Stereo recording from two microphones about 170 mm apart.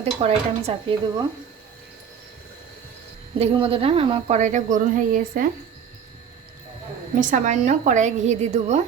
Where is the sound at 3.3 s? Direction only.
35° right (ahead or behind).